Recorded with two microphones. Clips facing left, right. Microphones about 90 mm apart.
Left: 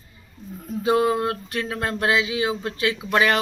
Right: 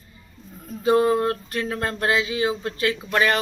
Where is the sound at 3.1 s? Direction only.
20° left (ahead or behind).